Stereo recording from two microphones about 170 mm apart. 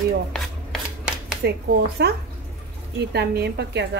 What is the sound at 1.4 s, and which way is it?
Speech, 75° right (ahead or behind).